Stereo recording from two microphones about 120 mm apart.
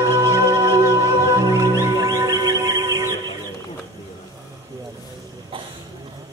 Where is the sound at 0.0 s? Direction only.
25° left (ahead or behind).